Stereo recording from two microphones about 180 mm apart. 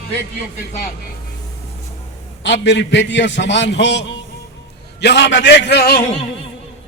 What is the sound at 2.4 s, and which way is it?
A man's voice, 80° left.